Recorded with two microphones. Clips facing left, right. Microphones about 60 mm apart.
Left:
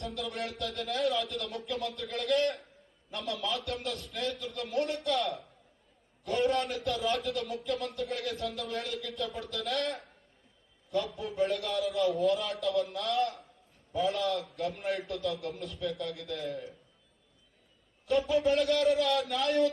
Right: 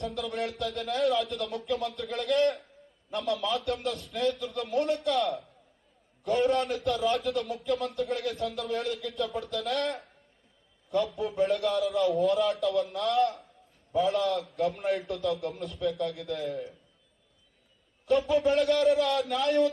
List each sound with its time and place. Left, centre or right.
0.0 s speech: centre
4.2 s speech: centre
4.5 s speech: centre
6.2 s a man's voice: centre
11.1 s a man's voice: centre
11.9 s a man's voice: centre
18.0 s a man's voice: centre